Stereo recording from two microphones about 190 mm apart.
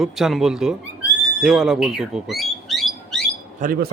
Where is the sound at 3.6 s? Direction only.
45° right (ahead or behind).